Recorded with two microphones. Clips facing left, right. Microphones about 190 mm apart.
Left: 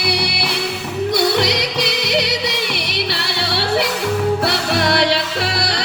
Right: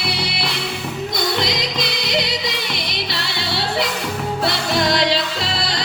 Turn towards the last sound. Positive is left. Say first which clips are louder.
# left 3 dB
turn(degrees=65)  # may be behind; listen again after turning